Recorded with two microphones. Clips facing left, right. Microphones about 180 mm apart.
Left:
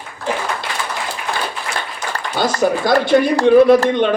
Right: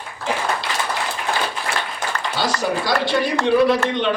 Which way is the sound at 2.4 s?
50° left (ahead or behind).